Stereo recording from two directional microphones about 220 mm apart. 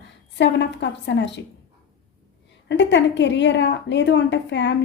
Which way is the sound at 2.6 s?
55° left (ahead or behind).